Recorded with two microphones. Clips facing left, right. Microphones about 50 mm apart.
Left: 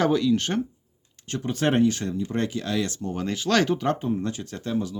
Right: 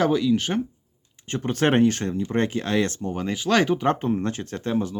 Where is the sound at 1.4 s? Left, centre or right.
Right.